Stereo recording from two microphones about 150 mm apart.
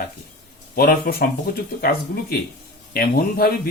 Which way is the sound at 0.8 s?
75° left (ahead or behind).